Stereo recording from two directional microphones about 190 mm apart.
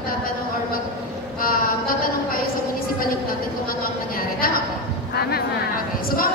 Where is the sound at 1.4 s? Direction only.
50° left (ahead or behind).